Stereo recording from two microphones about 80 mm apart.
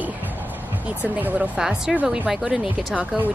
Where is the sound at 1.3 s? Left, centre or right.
Centre.